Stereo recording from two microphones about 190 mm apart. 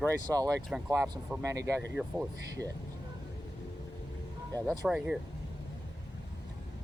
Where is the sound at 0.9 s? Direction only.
15° right (ahead or behind).